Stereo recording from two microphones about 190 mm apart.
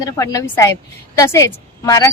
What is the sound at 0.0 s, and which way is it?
A woman's voice, 15° left (ahead or behind).